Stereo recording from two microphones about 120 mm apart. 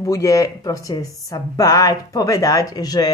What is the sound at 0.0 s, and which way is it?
Speech, 25° left (ahead or behind).